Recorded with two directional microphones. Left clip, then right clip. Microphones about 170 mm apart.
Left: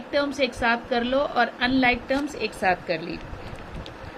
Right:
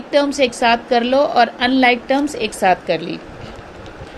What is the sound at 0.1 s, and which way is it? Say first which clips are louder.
A woman's voice: right 9 dB; 40° right (ahead or behind).